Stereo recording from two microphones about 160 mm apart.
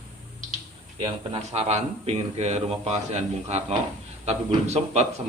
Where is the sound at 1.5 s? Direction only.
45° right (ahead or behind).